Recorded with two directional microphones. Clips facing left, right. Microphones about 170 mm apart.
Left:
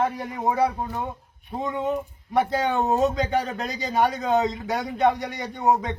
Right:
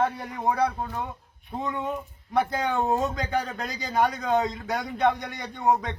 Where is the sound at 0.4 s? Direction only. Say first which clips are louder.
Left 2 dB; 5° left (ahead or behind).